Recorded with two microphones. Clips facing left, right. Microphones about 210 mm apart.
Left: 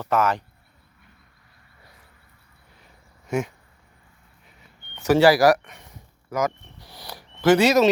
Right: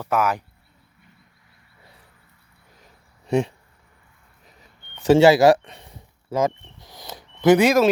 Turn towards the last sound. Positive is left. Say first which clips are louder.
# right 1 dB
turn(degrees=-10)  # may be behind; listen again after turning